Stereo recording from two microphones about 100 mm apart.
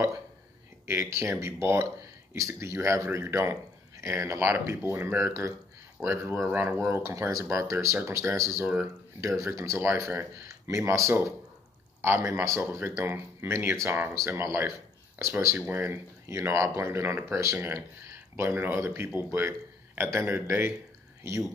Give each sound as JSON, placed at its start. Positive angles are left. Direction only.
{"t": 0.8, "sound": "speech", "side_deg": -25}